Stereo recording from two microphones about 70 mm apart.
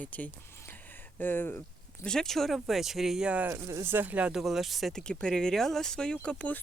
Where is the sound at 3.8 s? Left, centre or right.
Right.